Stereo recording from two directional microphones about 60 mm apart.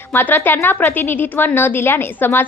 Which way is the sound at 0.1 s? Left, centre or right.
Left.